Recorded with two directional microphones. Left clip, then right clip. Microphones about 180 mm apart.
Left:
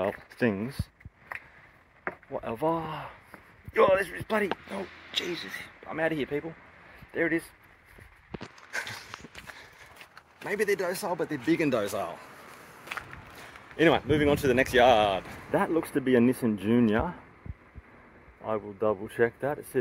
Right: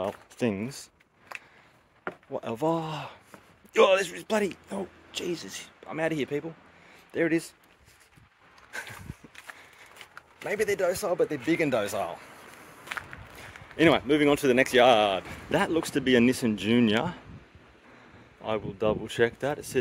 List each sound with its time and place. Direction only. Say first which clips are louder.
0.0 s a sound: left 2 dB; 5° right (ahead or behind)
2.3 s speech: right 1 dB; 35° right (ahead or behind)
5.1 s speech: left 2 dB; 90° right
5.4 s speech: left 3 dB; 25° right (ahead or behind)
8.7 s a sound: left 4 dB; 15° left (ahead or behind)
10.4 s speech: right 1 dB; 15° right (ahead or behind)
18.4 s speech: right 1 dB; 20° right (ahead or behind)